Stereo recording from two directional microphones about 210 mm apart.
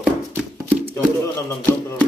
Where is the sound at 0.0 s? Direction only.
5° right (ahead or behind).